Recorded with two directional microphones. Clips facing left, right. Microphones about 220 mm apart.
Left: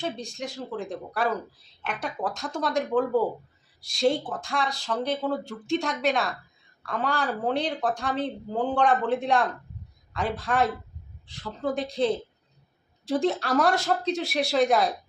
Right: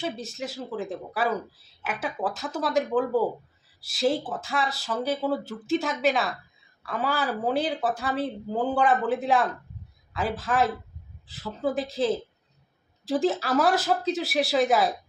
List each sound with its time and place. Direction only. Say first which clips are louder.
0.0 s a man's voice: even; 5° right (ahead or behind)